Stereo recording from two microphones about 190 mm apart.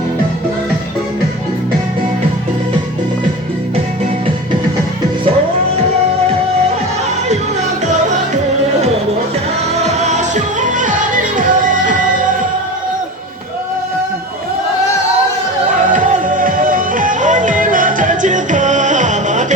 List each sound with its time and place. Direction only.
9.8 s music: 35° right (ahead or behind)
15.9 s music: 45° right (ahead or behind)